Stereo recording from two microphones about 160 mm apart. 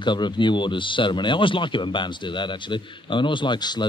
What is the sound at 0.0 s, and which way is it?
A man's voice, 30° left (ahead or behind).